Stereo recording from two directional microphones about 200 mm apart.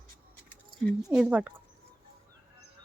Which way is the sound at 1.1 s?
5° right (ahead or behind).